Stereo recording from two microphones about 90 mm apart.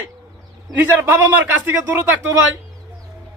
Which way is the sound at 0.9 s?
30° right (ahead or behind).